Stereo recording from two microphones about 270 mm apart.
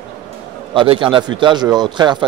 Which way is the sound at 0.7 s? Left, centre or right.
Centre.